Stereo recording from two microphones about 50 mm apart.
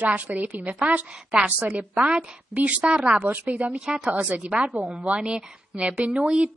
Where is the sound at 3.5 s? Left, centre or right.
Right.